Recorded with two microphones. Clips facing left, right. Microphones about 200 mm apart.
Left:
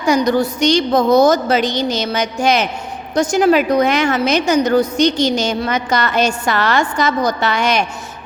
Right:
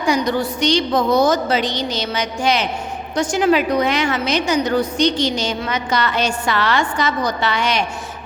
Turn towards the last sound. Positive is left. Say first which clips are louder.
# left 3 dB
turn(degrees=45)  # may be behind; listen again after turning